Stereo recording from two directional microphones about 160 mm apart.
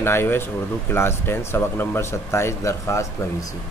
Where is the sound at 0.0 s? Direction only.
15° left (ahead or behind).